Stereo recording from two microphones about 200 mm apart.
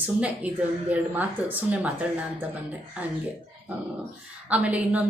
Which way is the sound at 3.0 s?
5° right (ahead or behind).